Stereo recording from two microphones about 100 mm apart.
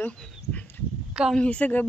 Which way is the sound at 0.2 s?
15° left (ahead or behind).